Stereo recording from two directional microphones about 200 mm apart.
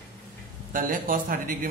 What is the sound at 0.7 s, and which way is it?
A woman's voice, 45° right (ahead or behind).